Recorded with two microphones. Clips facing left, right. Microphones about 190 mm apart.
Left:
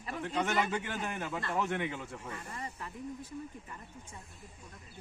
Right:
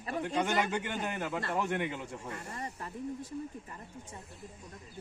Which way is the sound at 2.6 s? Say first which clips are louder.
Right 2 dB; 40° right (ahead or behind).